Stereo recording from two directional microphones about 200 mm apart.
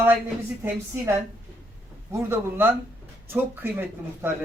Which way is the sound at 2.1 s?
10° right (ahead or behind).